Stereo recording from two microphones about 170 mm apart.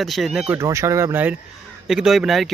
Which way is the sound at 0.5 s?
15° right (ahead or behind).